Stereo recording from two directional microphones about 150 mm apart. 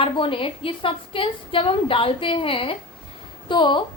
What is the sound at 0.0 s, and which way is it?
A woman's voice, 35° left (ahead or behind).